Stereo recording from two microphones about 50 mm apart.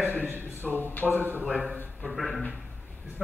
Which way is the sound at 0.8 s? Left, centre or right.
Left.